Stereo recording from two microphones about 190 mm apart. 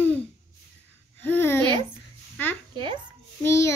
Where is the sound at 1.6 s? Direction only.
25° right (ahead or behind).